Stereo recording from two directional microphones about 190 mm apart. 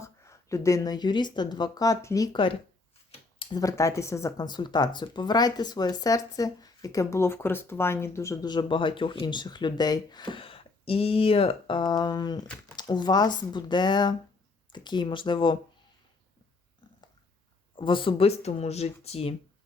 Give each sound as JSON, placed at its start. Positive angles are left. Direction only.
{"t": 0.0, "sound": "speech", "side_deg": 15}
{"t": 3.1, "sound": "a sound", "side_deg": 30}
{"t": 3.6, "sound": "speech", "side_deg": 15}
{"t": 17.7, "sound": "speech", "side_deg": 25}